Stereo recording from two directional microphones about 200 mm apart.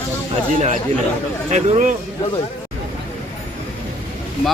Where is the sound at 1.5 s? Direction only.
35° right (ahead or behind).